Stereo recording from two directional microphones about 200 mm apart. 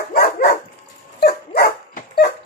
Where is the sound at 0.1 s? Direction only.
50° left (ahead or behind).